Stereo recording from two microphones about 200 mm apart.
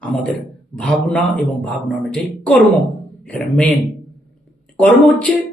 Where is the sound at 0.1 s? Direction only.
5° left (ahead or behind).